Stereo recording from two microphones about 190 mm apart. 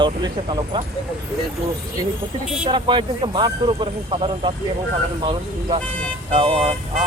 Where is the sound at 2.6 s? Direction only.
25° right (ahead or behind).